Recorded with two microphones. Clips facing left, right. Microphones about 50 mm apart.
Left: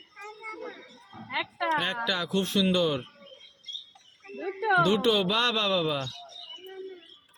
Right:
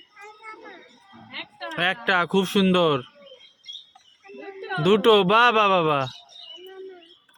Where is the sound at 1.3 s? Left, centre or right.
Left.